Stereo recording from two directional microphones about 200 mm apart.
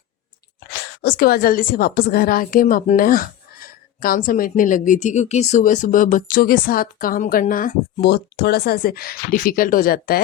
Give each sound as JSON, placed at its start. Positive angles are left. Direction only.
{"t": 1.0, "sound": "a woman's voice", "side_deg": 50}